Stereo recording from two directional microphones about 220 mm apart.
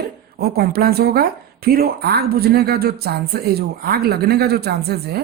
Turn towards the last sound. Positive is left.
turn(degrees=-45)  # may be behind; listen again after turning